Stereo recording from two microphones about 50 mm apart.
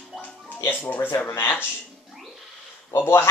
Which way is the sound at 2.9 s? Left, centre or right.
Left.